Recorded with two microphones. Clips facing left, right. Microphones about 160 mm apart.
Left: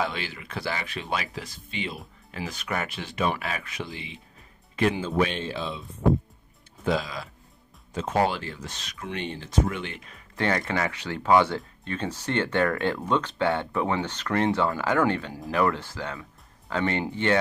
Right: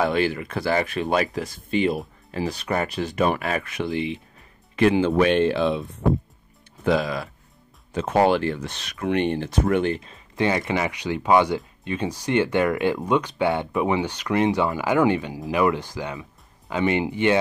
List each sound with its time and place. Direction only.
0.0 s speech: 50° right (ahead or behind)
2.3 s speech: 35° right (ahead or behind); by 9.9 s 55° right (ahead or behind)
9.9 s speech: 30° right (ahead or behind)
10.3 s speech: 15° right (ahead or behind)